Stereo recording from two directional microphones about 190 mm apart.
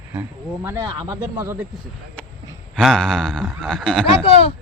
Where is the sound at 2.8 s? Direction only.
Centre (ahead or behind).